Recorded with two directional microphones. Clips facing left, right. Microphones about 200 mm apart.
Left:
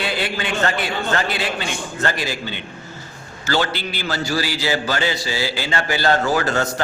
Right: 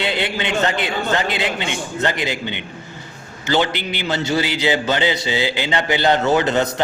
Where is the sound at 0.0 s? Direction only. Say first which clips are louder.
Right 2 dB; 20° right (ahead or behind).